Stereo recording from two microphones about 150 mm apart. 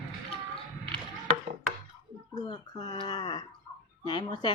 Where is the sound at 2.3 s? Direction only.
25° left (ahead or behind).